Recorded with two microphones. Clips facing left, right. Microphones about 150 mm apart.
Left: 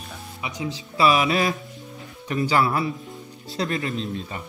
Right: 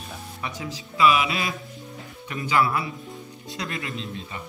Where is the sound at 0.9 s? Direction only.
35° left (ahead or behind).